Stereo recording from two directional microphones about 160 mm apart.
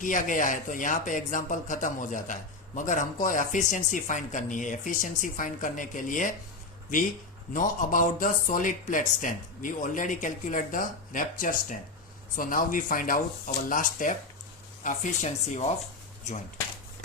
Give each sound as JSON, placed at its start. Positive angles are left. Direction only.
{"t": 0.0, "sound": "speech", "side_deg": 55}
{"t": 7.5, "sound": "speech", "side_deg": 55}